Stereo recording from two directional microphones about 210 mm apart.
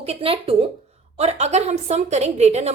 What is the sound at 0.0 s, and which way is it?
A woman's voice, 30° right (ahead or behind).